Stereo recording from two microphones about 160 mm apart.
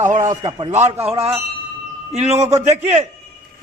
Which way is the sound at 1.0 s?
35° right (ahead or behind).